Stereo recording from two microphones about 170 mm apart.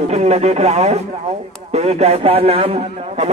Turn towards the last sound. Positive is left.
turn(degrees=-35)  # may be behind; listen again after turning